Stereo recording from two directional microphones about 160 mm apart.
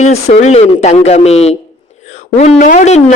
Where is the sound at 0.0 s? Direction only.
45° left (ahead or behind).